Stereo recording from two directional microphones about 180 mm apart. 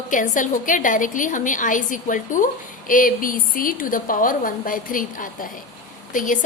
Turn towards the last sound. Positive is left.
turn(degrees=45)  # may be behind; listen again after turning